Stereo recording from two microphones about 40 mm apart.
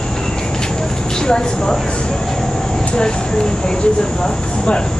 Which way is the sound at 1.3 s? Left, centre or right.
Centre.